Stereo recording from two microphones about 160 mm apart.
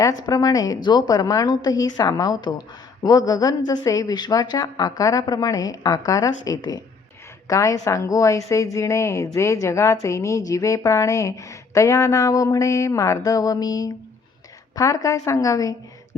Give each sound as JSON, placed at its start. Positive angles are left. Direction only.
{"t": 0.3, "sound": "a woman's voice", "side_deg": 25}